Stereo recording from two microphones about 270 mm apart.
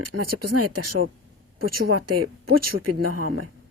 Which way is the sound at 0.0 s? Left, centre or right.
Right.